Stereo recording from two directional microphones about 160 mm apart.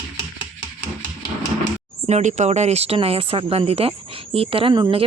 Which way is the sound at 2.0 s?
45° right (ahead or behind).